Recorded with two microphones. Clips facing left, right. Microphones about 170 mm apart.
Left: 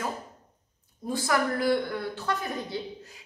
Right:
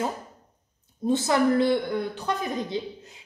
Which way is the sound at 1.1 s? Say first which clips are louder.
Right 6 dB; 25° right (ahead or behind).